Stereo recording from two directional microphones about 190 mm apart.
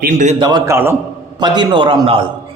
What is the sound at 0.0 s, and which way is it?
Speech, 40° right (ahead or behind).